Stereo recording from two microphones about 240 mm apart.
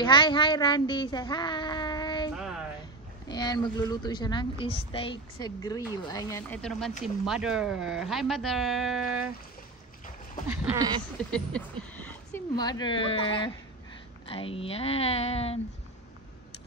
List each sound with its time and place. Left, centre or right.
0.0 s speech: centre
2.3 s a sound: centre
3.3 s a woman's voice: centre
10.5 s a sound: centre
11.3 s speech: centre
12.5 s speech: centre